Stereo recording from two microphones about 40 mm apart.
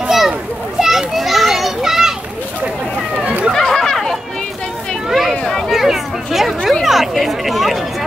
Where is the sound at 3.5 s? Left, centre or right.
Centre.